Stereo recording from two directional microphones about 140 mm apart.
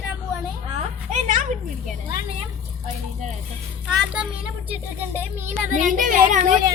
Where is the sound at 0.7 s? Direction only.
65° right (ahead or behind).